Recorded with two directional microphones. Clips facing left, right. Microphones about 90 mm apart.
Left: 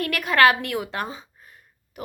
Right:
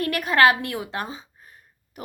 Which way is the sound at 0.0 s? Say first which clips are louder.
Even; 30° right (ahead or behind).